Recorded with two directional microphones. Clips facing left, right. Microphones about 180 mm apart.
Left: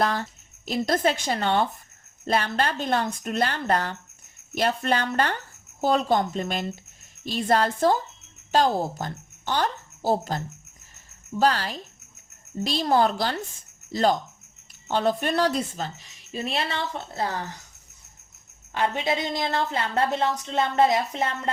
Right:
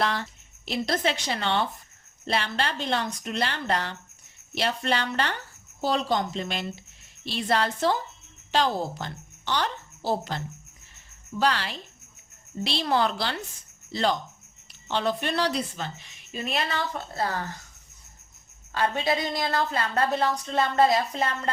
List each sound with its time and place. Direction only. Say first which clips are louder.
0.0 s a woman's voice: left 2 dB; 45° left (ahead or behind)
10.9 s a sound: left 3 dB; 40° left (ahead or behind)
12.6 s a woman's voice: left 3 dB; 45° left (ahead or behind); by 17.5 s 15° left (ahead or behind)
18.7 s a woman's voice: even; 20° left (ahead or behind)